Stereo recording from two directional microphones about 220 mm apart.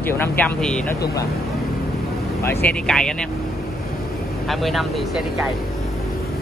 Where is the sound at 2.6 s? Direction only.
5° left (ahead or behind).